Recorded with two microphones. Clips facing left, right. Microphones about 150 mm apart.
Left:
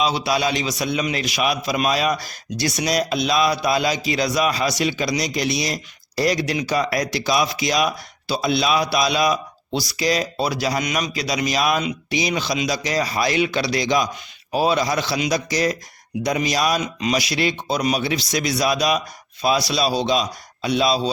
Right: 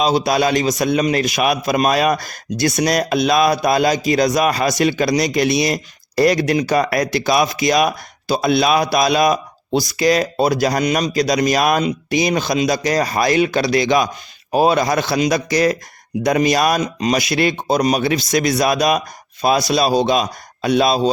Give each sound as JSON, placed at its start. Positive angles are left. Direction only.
{"t": 0.0, "sound": "a man's voice", "side_deg": -45}
{"t": 10.8, "sound": "a man's voice", "side_deg": -35}
{"t": 16.8, "sound": "a man's voice", "side_deg": -40}